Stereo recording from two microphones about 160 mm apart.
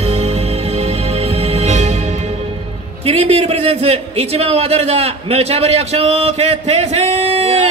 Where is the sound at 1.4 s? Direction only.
40° right (ahead or behind).